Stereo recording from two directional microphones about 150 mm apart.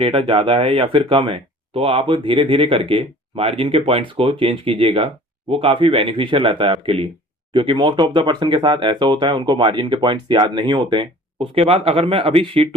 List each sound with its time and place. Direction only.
0.0 s speech: 40° right (ahead or behind)